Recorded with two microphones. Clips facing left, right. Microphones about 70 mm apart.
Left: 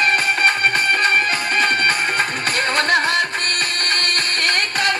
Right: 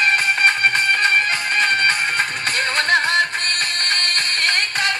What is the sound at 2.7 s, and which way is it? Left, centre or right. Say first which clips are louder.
Music: even; left.